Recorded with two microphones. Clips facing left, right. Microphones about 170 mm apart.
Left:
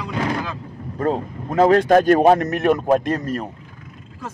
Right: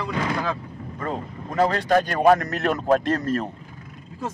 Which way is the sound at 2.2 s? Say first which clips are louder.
Left 3 dB; 25° left (ahead or behind).